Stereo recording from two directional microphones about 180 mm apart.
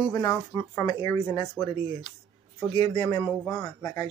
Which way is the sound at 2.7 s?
25° left (ahead or behind).